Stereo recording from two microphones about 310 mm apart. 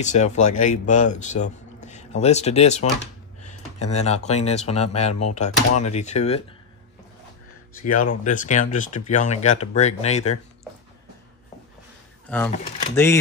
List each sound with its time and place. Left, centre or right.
0.0 s speech: left
7.8 s speech: left
12.3 s speech: centre